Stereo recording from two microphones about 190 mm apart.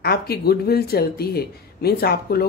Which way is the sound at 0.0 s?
55° left (ahead or behind).